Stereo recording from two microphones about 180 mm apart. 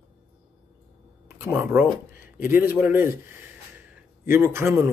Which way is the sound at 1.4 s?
10° right (ahead or behind).